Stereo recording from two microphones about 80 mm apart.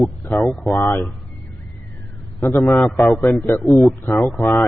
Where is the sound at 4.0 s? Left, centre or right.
Left.